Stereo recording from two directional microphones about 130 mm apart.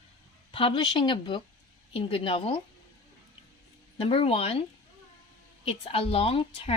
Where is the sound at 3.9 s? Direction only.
45° left (ahead or behind).